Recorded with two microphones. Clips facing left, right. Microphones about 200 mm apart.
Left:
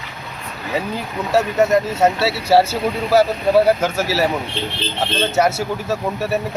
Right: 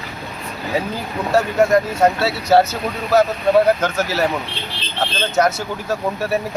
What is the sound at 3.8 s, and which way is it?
Speech, 5° left (ahead or behind).